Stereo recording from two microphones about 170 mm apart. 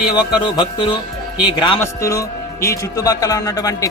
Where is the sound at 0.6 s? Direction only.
25° left (ahead or behind).